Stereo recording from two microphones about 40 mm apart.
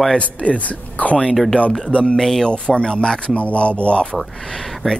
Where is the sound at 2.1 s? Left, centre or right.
Centre.